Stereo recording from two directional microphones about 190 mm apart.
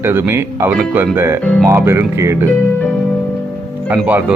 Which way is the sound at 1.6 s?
15° right (ahead or behind).